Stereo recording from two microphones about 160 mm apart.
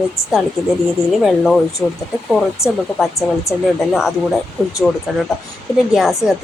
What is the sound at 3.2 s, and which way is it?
Speech, 20° left (ahead or behind).